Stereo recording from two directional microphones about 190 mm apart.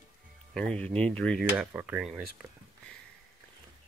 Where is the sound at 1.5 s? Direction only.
10° right (ahead or behind).